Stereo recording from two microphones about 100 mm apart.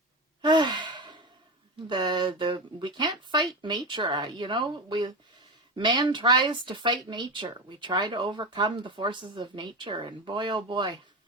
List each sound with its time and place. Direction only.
0.4 s sigh: 50° right (ahead or behind)
1.9 s speech: 45° right (ahead or behind)